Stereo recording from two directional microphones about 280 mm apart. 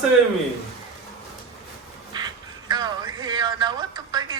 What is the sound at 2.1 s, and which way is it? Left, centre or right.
Music, centre.